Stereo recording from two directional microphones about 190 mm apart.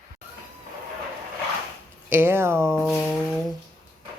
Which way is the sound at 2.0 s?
10° right (ahead or behind).